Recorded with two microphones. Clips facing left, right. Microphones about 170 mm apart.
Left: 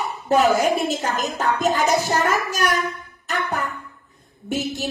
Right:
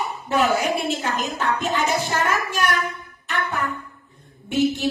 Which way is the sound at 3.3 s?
40° left (ahead or behind).